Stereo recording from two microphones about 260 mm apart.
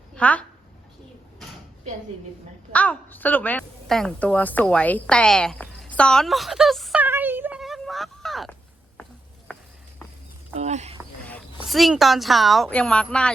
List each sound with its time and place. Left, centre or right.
0.1 s speech: centre
2.7 s a woman's voice: centre
9.5 s walk: centre
10.5 s speech: right
11.2 s speech: centre